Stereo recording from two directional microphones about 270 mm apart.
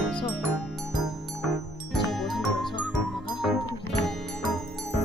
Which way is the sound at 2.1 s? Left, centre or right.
Centre.